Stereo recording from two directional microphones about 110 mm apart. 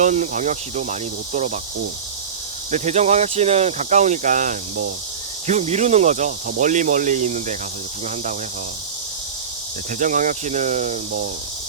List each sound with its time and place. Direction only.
0.0 s speech: 90° right
2.7 s speech: 90° right
5.5 s speech: 90° right
10.4 s speech: 90° right